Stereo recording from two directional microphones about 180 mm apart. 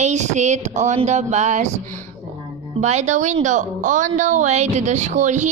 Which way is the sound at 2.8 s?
40° right (ahead or behind).